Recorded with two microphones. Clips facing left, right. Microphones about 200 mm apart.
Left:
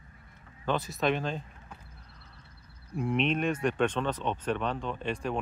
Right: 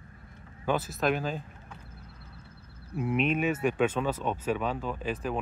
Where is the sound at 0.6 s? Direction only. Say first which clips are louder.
Right 1 dB; 5° right (ahead or behind).